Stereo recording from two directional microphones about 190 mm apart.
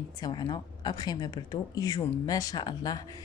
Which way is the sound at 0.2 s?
25° left (ahead or behind).